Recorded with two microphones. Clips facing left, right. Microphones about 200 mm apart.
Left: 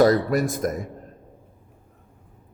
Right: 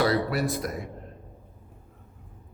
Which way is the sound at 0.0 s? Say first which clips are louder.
Left 6 dB; 45° left (ahead or behind).